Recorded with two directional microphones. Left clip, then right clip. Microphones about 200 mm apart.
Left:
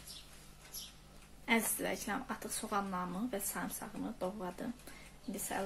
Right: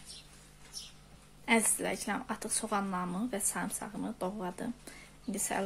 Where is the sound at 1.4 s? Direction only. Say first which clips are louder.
Right 4 dB; 25° right (ahead or behind).